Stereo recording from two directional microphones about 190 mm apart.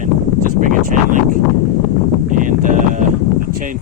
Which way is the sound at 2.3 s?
45° right (ahead or behind).